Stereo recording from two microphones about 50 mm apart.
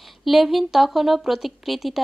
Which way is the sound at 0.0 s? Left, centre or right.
Centre.